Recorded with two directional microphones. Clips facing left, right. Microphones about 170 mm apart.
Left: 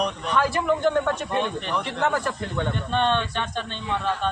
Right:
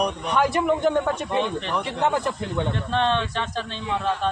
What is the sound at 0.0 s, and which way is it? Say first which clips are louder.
Speech: right 2 dB; 20° right (ahead or behind).